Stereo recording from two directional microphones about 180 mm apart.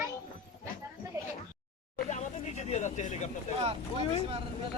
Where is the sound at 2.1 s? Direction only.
40° left (ahead or behind).